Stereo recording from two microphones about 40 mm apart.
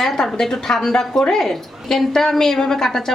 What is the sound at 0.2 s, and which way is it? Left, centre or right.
Speech, centre.